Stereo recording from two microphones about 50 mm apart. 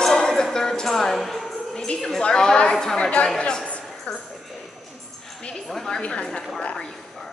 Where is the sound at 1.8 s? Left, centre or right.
Centre.